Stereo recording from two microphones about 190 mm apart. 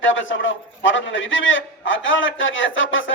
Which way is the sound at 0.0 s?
90° left.